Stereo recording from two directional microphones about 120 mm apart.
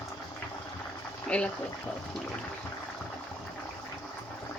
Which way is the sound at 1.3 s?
10° left (ahead or behind).